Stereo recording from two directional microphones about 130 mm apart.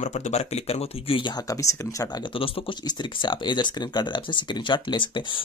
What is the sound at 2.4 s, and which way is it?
Speech, 35° left (ahead or behind).